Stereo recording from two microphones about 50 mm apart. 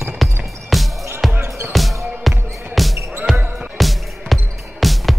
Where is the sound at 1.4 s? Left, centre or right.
Right.